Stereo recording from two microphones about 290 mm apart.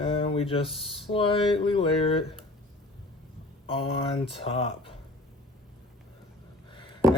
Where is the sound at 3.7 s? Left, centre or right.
Centre.